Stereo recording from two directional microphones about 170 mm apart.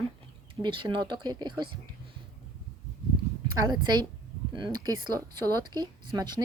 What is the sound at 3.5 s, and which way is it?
Speech, 25° right (ahead or behind).